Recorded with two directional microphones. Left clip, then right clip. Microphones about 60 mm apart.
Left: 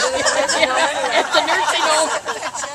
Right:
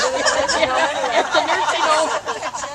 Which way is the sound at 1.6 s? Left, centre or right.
Left.